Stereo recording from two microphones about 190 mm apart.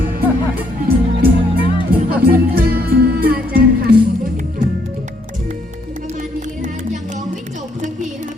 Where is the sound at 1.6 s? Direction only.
25° left (ahead or behind).